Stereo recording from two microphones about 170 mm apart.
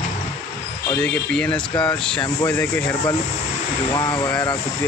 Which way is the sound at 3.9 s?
25° left (ahead or behind).